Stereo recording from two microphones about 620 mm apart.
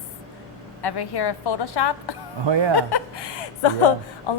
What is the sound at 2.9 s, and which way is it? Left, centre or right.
Speech, left.